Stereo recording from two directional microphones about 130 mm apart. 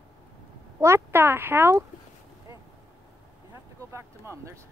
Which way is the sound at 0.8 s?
20° right (ahead or behind).